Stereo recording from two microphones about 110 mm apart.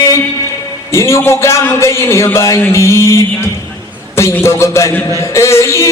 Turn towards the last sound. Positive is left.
turn(degrees=25)  # may be behind; listen again after turning